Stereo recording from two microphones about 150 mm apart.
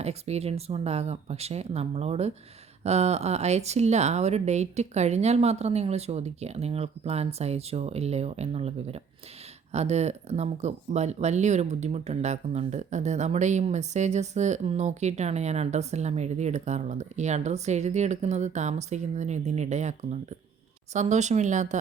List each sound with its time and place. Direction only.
0.0 s speech: 45° right (ahead or behind)